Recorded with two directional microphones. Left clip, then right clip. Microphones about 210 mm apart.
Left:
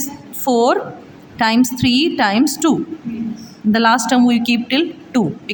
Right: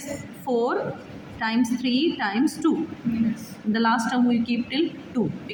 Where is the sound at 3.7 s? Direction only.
45° left (ahead or behind).